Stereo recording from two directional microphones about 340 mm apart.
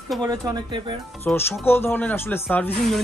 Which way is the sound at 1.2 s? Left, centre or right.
Centre.